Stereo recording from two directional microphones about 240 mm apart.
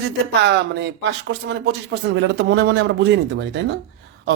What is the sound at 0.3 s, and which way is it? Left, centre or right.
Speech, right.